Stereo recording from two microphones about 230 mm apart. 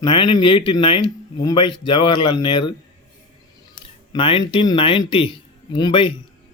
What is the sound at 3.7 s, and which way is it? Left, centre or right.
Speech, left.